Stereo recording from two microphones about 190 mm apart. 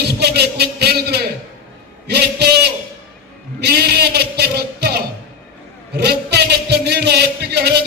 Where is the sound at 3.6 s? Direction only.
60° right (ahead or behind).